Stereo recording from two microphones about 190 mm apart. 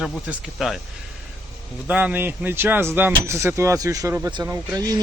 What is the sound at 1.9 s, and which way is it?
Speech, 10° right (ahead or behind).